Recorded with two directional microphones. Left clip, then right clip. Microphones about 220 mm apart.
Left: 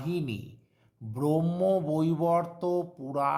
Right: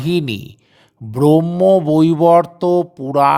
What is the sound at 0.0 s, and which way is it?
Speech, 40° right (ahead or behind).